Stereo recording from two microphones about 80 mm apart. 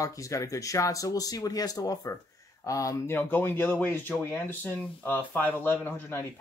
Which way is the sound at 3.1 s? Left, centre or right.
Left.